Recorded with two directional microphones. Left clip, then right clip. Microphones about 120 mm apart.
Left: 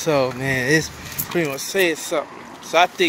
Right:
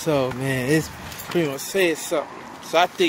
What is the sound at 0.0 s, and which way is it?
Speech, 25° right (ahead or behind).